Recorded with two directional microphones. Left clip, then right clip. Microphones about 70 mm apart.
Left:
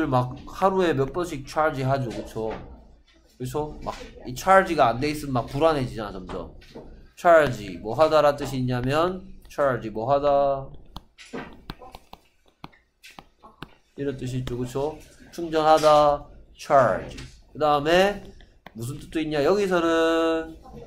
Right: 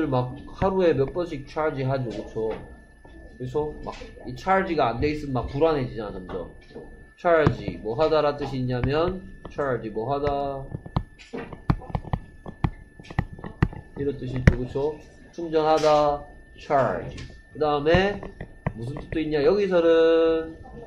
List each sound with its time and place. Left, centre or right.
0.0 s speech: left
11.3 s speech: left
13.9 s speech: left
17.6 s speech: left
19.1 s speech: left